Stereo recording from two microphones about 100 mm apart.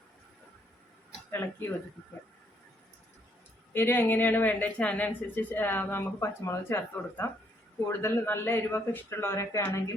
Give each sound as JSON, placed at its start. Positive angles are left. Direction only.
{"t": 1.3, "sound": "a woman's voice", "side_deg": 20}
{"t": 3.7, "sound": "a woman's voice", "side_deg": 20}